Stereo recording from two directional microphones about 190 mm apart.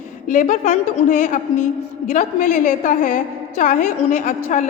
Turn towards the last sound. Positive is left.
turn(degrees=40)  # may be behind; listen again after turning